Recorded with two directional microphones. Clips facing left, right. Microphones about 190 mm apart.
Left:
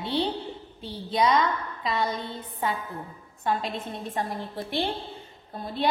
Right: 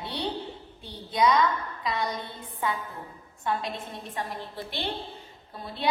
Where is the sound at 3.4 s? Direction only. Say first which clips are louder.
Left 2 dB; 45° left (ahead or behind).